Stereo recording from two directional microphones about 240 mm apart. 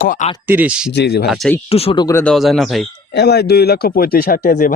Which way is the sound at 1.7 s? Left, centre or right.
Left.